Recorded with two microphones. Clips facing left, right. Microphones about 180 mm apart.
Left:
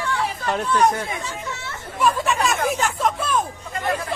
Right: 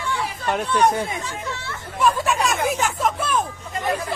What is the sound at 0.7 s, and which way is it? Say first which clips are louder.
Speech: even; 30° right (ahead or behind).